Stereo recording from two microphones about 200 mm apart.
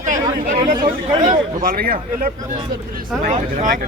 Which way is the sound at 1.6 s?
45° right (ahead or behind).